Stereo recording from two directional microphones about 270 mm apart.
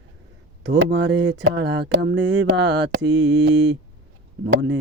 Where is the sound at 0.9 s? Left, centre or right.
Right.